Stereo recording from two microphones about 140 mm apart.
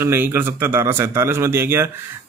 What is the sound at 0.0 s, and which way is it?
Speech, 15° right (ahead or behind).